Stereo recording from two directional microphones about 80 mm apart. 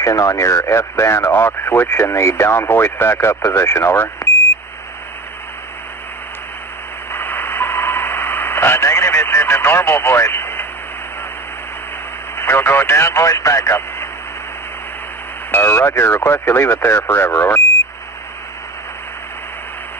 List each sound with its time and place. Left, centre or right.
0.0 s speech: left
7.1 s radio: left
12.4 s speech: left
15.5 s speech: left